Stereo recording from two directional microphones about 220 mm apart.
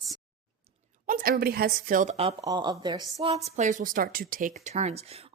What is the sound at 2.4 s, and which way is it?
Speech, 20° right (ahead or behind).